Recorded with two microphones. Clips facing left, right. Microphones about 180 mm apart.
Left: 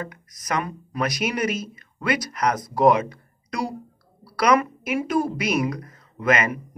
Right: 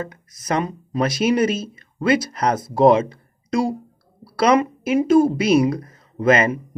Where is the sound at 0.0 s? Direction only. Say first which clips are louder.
Right 3 dB; 25° right (ahead or behind).